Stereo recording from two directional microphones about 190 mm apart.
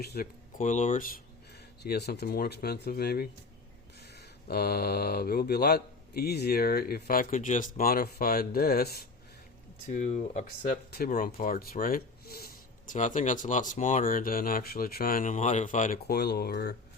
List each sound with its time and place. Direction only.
0.0 s speech: 55° left (ahead or behind)
0.6 s speech: 40° left (ahead or behind)
1.8 s speech: 60° left (ahead or behind)
9.9 s speech: 40° left (ahead or behind); by 16.7 s 55° left (ahead or behind)